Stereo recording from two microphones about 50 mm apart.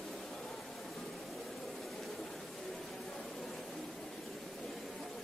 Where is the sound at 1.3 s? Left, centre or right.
Centre.